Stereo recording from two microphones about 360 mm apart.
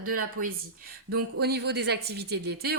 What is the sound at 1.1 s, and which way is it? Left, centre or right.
Speech, right.